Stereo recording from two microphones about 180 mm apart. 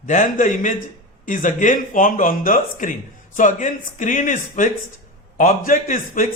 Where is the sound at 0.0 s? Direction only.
45° left (ahead or behind).